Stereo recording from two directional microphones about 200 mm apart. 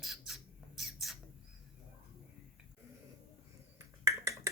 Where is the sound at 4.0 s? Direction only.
15° right (ahead or behind).